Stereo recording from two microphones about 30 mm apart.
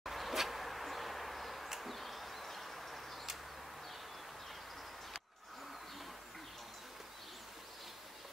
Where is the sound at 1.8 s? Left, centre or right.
Centre.